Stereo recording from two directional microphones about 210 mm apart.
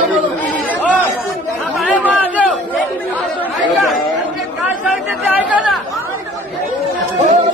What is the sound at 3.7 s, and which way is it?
Chatter, centre (ahead or behind).